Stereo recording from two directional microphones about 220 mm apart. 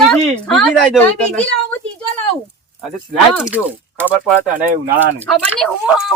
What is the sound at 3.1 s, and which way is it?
A woman's voice, 5° right (ahead or behind).